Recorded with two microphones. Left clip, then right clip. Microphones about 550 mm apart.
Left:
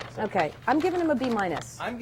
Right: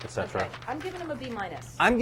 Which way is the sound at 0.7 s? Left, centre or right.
Left.